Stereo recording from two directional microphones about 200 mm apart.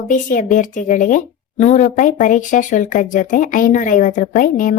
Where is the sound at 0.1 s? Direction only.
40° left (ahead or behind).